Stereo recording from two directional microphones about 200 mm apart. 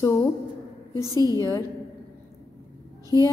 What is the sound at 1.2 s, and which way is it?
Speech, 15° left (ahead or behind).